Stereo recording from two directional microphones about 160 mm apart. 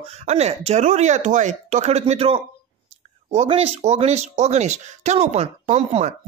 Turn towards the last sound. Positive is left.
turn(degrees=-45)  # may be behind; listen again after turning